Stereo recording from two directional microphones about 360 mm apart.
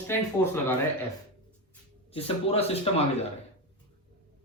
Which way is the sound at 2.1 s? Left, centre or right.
Centre.